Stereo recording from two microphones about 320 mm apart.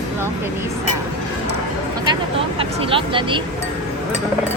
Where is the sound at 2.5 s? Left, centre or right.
Centre.